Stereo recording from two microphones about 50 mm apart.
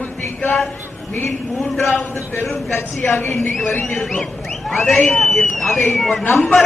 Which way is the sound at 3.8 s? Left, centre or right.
Centre.